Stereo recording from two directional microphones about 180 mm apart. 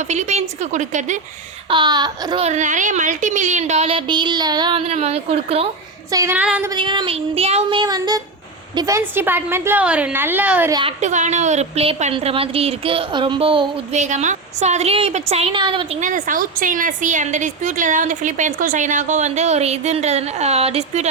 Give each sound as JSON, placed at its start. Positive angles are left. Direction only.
{"t": 0.0, "sound": "speech", "side_deg": -40}
{"t": 1.7, "sound": "child singing", "side_deg": -25}
{"t": 2.4, "sound": "speech", "side_deg": -40}
{"t": 4.9, "sound": "speech", "side_deg": -35}
{"t": 6.1, "sound": "a woman's voice", "side_deg": -15}
{"t": 6.7, "sound": "child singing", "side_deg": -25}
{"t": 8.7, "sound": "a woman's voice", "side_deg": -20}
{"t": 10.7, "sound": "child singing", "side_deg": -25}
{"t": 11.0, "sound": "speech", "side_deg": -40}
{"t": 14.0, "sound": "speech", "side_deg": -40}
{"t": 16.0, "sound": "a woman's voice", "side_deg": -45}